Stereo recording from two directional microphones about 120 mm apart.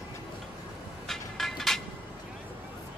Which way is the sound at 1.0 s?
Centre (ahead or behind).